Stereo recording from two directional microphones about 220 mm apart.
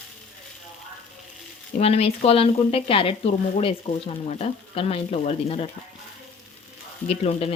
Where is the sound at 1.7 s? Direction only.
25° left (ahead or behind).